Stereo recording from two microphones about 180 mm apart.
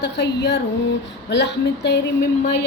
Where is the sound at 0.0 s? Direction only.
70° left (ahead or behind).